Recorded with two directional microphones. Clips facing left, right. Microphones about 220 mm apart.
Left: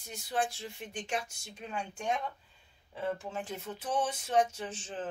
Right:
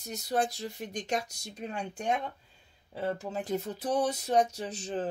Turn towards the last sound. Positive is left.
turn(degrees=-40)  # may be behind; listen again after turning